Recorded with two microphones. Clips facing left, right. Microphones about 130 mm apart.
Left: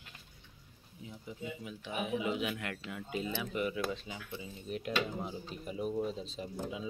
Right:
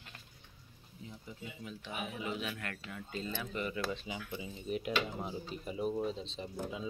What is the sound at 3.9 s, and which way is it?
Speech, 5° right (ahead or behind).